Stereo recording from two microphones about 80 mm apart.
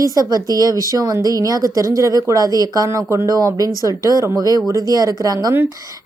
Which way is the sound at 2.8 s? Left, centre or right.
Right.